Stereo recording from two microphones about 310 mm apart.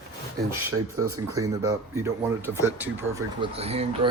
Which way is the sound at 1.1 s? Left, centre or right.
Centre.